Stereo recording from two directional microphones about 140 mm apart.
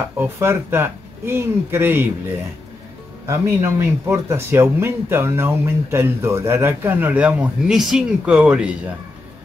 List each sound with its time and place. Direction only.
0.2 s speech: 15° right (ahead or behind)
3.3 s speech: 20° right (ahead or behind)